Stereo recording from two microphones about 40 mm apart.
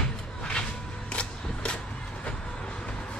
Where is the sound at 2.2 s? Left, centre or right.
Left.